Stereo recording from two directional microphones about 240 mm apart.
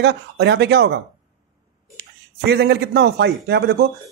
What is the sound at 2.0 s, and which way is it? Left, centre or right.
A man's voice, right.